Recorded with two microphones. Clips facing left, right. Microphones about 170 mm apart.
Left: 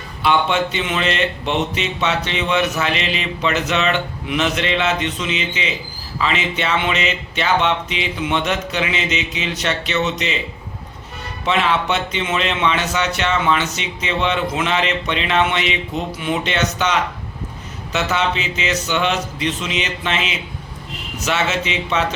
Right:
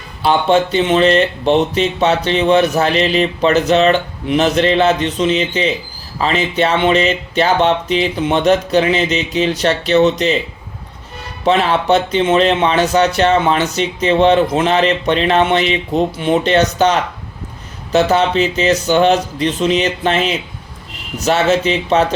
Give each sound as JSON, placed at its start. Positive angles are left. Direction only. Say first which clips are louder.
{"t": 0.2, "sound": "speech", "louder": "right 5 dB", "side_deg": -35}
{"t": 11.4, "sound": "speech", "louder": "right 6 dB", "side_deg": -35}